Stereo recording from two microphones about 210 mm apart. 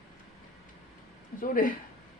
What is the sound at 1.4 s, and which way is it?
Speech, 40° left (ahead or behind).